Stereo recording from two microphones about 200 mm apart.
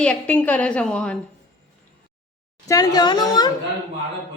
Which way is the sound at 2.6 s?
20° left (ahead or behind).